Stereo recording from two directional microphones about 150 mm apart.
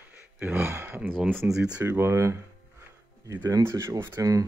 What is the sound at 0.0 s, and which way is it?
Speech, 15° right (ahead or behind).